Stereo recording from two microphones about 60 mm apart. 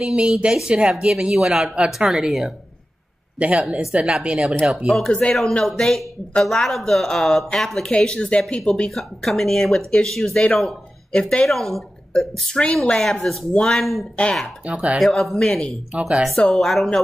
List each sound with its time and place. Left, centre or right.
0.0 s a woman's voice: centre
3.3 s a woman's voice: right
4.9 s a woman's voice: centre
14.6 s speech: right
15.0 s speech: centre
15.9 s a woman's voice: centre
16.3 s a woman's voice: centre